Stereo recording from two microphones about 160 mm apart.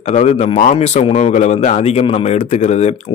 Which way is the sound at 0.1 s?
45° left (ahead or behind).